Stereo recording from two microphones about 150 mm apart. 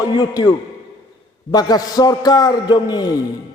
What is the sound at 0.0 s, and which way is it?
A man's voice, 25° left (ahead or behind).